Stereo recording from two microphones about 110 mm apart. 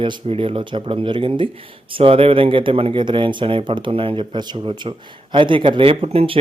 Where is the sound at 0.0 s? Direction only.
55° right (ahead or behind).